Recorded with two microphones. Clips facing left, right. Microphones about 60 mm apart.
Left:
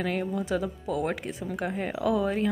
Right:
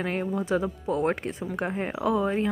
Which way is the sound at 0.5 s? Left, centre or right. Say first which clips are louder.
Right 3 dB; right.